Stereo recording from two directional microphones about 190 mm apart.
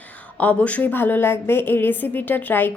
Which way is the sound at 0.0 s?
10° left (ahead or behind).